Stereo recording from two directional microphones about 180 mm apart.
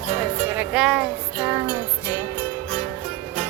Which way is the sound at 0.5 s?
5° right (ahead or behind).